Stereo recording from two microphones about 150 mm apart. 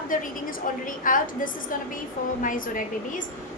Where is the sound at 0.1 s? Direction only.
65° left (ahead or behind).